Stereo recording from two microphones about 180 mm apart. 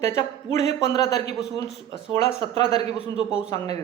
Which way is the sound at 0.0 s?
15° left (ahead or behind).